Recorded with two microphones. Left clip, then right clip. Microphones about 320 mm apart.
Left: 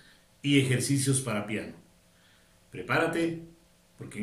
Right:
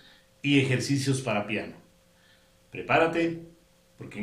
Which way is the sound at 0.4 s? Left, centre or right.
Centre.